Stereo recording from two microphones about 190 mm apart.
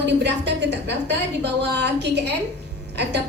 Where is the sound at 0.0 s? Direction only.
65° right (ahead or behind).